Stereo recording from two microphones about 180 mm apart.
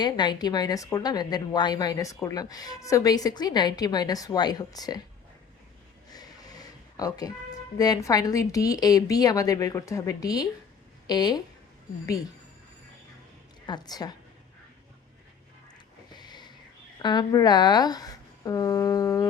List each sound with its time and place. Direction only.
0.0 s a woman's voice: 25° left (ahead or behind)
6.1 s a sound: 20° left (ahead or behind)
7.8 s a woman's voice: 20° left (ahead or behind)
13.7 s a woman's voice: 25° left (ahead or behind)
16.1 s a sound: 25° left (ahead or behind)
17.0 s a woman's voice: 25° left (ahead or behind)